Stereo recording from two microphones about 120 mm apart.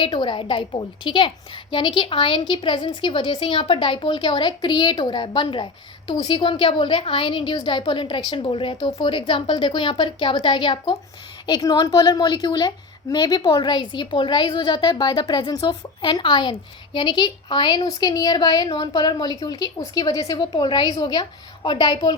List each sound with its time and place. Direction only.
0.0 s a woman's voice: 45° left (ahead or behind)